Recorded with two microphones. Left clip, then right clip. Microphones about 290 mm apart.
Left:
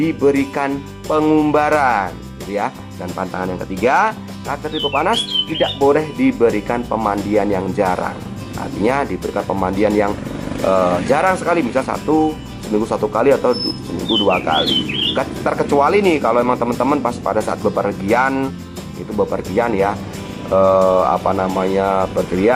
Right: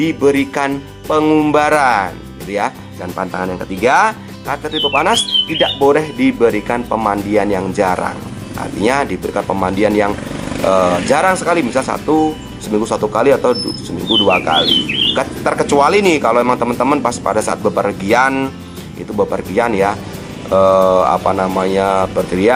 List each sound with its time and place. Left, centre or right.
0.0 s speech: centre
3.2 s speech: centre
12.0 s speech: left
12.9 s speech: centre
19.1 s speech: centre
19.5 s speech: centre
20.5 s speech: centre